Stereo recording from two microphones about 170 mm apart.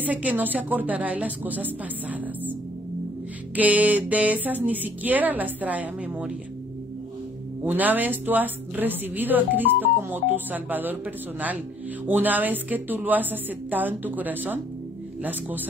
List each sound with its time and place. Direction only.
0.0 s a woman's voice: 10° right (ahead or behind)
3.5 s a woman's voice: 10° right (ahead or behind)
7.6 s a woman's voice: 10° right (ahead or behind)